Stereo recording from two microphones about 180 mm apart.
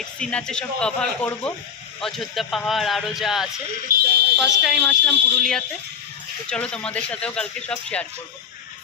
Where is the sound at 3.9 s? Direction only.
50° right (ahead or behind).